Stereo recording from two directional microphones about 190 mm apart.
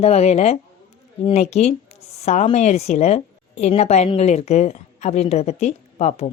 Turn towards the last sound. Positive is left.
turn(degrees=35)  # may be behind; listen again after turning